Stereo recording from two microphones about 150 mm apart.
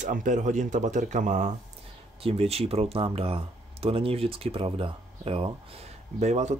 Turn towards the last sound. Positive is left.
turn(degrees=-50)  # may be behind; listen again after turning